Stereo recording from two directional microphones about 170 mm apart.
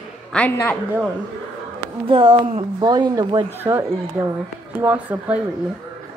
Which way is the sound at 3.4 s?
15° right (ahead or behind).